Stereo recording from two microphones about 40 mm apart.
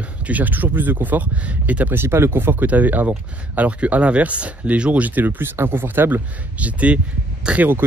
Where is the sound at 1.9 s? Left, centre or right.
Right.